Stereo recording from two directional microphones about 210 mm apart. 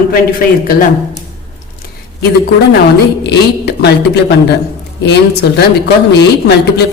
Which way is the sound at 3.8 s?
50° left (ahead or behind).